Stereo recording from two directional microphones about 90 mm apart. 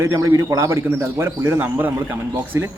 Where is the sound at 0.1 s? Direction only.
40° right (ahead or behind).